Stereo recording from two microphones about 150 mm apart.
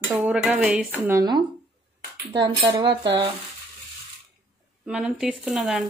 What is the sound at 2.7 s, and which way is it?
Speech, 30° right (ahead or behind).